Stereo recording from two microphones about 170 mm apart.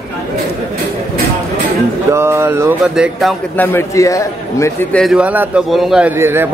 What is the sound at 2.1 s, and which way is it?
Speech, 15° right (ahead or behind).